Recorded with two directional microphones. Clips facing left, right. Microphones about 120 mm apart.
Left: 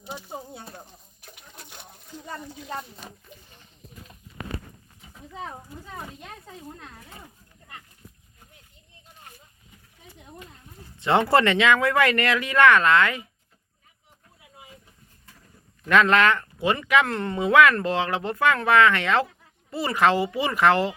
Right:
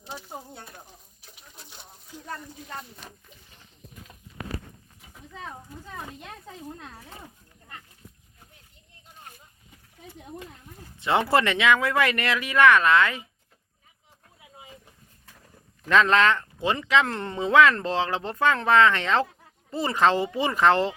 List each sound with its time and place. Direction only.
0.0 s speech: 15° left (ahead or behind)
1.2 s a sound: 60° left (ahead or behind)
11.0 s speech: 15° right (ahead or behind)
15.9 s speech: 20° right (ahead or behind)
17.1 s speech: 30° right (ahead or behind)
20.1 s speech: 10° left (ahead or behind)
20.4 s speech: 25° right (ahead or behind)